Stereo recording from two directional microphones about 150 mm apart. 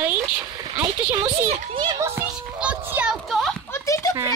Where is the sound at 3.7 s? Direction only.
20° left (ahead or behind).